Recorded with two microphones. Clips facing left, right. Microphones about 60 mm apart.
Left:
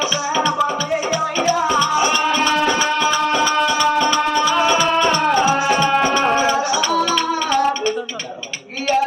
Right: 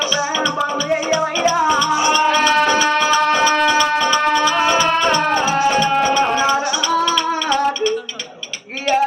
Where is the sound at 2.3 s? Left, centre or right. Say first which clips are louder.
Right 3 dB; right.